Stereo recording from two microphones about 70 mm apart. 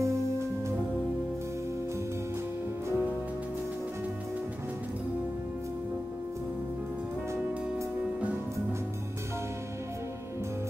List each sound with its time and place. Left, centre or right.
0.0 s music: right
8.0 s music: centre